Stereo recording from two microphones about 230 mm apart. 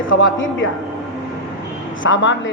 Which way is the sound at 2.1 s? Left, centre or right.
Left.